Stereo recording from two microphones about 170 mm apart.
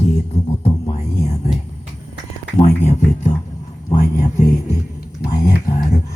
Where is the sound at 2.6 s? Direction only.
45° left (ahead or behind).